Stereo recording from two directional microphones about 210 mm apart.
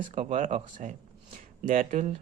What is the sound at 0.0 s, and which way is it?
Speech, 35° right (ahead or behind).